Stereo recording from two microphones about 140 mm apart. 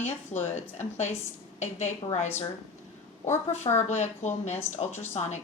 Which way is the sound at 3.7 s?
55° left (ahead or behind).